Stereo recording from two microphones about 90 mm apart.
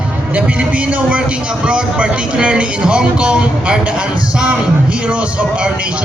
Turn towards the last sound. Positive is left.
turn(degrees=-10)  # may be behind; listen again after turning